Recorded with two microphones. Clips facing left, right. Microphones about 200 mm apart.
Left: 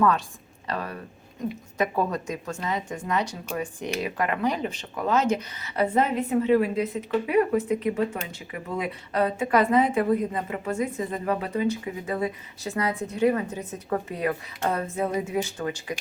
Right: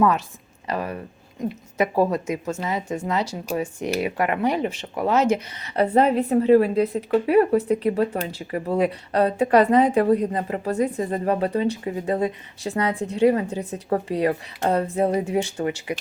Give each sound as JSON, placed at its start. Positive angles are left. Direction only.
{"t": 0.7, "sound": "speech", "side_deg": -25}
{"t": 4.7, "sound": "speech", "side_deg": -10}
{"t": 5.7, "sound": "a woman's voice", "side_deg": -35}